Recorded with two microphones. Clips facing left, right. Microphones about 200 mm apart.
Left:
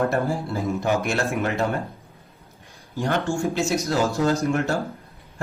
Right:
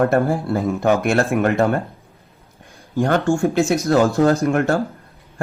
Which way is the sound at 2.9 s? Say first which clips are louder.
Right 7 dB; 50° right (ahead or behind).